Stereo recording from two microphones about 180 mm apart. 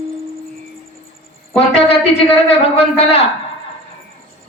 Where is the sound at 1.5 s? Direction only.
35° left (ahead or behind).